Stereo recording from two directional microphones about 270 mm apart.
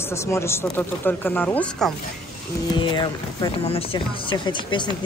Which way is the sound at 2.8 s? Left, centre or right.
Centre.